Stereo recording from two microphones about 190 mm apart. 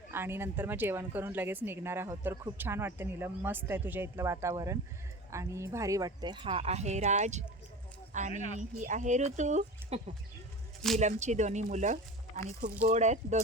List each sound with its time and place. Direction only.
0.1 s speech: 10° right (ahead or behind); by 10.0 s 40° right (ahead or behind)
11.0 s speech: 40° right (ahead or behind)